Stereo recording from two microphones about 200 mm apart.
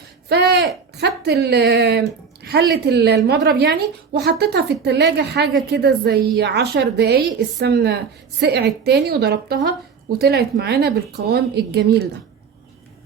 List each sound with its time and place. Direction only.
0.3 s a woman's voice: 55° right (ahead or behind)